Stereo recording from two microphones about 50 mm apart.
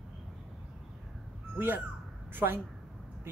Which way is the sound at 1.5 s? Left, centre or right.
Right.